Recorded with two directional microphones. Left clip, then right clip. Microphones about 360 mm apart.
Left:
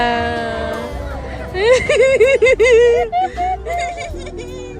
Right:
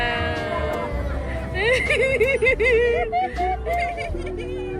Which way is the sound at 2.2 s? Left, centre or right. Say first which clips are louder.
Left 8 dB; left.